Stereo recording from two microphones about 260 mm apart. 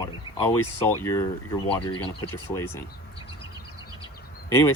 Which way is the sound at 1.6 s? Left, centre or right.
Centre.